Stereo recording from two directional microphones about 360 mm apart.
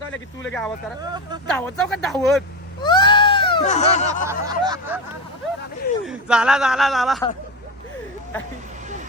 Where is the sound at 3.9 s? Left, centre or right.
Centre.